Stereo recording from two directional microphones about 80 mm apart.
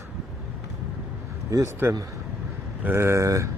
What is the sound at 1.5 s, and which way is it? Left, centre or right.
Speech, right.